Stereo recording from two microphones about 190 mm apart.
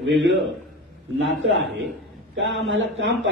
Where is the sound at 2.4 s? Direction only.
75° right (ahead or behind).